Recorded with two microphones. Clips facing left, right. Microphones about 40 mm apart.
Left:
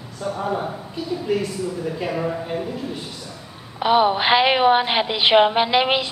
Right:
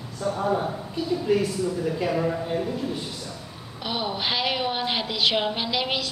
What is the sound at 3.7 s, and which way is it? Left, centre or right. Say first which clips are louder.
A woman's voice: left 12 dB; left.